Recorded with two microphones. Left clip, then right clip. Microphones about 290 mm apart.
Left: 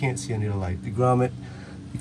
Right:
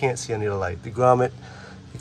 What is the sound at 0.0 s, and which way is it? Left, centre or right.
Speech, centre.